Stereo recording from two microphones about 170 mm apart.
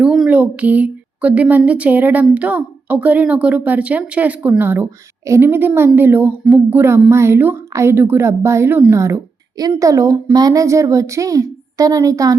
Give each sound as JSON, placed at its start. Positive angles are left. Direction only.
{"t": 0.0, "sound": "speech", "side_deg": -5}